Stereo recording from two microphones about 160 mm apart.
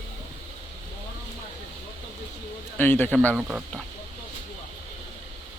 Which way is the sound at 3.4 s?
10° right (ahead or behind).